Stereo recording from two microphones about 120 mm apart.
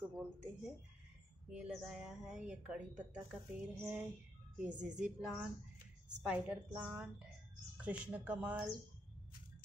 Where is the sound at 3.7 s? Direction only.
15° right (ahead or behind).